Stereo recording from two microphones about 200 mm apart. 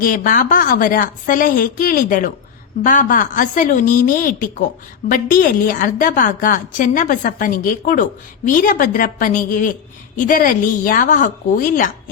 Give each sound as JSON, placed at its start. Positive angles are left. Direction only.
{"t": 0.0, "sound": "a woman's voice", "side_deg": 45}